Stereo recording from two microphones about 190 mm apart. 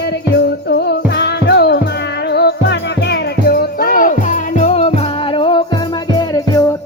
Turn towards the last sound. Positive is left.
turn(degrees=20)  # may be behind; listen again after turning